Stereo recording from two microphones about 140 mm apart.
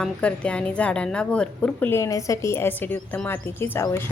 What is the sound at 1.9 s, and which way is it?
A woman's voice, 20° left (ahead or behind).